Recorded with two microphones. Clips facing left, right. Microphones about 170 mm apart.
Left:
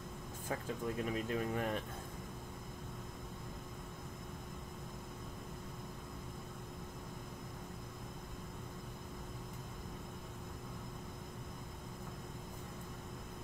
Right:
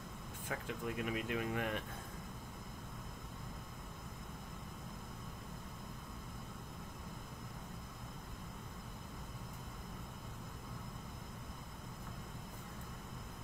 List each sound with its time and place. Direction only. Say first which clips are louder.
0.5 s speech: left 2 dB; 35° left (ahead or behind)